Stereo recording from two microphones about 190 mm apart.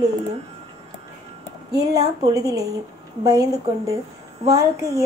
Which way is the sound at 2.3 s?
15° right (ahead or behind).